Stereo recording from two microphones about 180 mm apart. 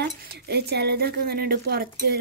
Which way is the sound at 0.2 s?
65° right (ahead or behind).